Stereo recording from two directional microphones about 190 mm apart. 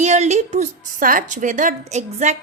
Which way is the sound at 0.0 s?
35° right (ahead or behind).